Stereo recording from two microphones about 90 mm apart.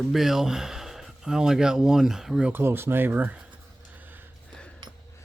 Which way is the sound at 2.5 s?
25° right (ahead or behind).